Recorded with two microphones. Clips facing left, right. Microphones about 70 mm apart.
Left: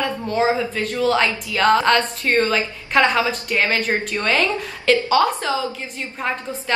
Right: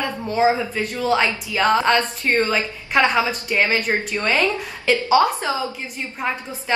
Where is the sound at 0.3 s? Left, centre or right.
Centre.